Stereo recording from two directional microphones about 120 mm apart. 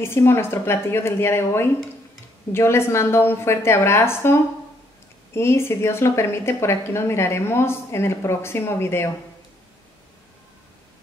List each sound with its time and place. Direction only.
0.0 s a woman's voice: 20° left (ahead or behind)